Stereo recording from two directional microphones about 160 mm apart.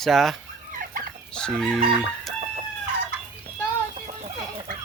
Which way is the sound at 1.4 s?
5° left (ahead or behind).